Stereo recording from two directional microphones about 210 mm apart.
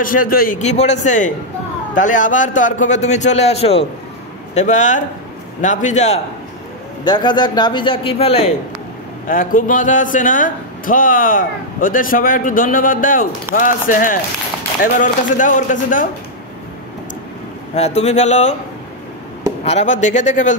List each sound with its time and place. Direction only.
0.0 s a man's voice: 40° left (ahead or behind)
7.1 s a man's voice: 20° left (ahead or behind)
9.3 s a man's voice: 40° left (ahead or behind)
17.7 s a man's voice: 30° left (ahead or behind)
19.6 s a man's voice: 30° left (ahead or behind)